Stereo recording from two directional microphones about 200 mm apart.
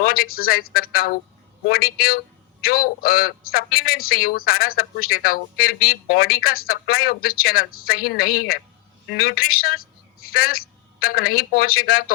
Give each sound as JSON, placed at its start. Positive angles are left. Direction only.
{"t": 0.0, "sound": "a man's voice", "side_deg": 50}